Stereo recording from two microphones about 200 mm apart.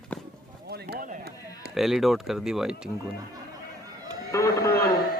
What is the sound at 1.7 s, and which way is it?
Speech, centre (ahead or behind).